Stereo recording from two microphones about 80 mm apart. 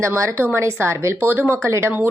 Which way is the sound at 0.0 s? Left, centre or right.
Right.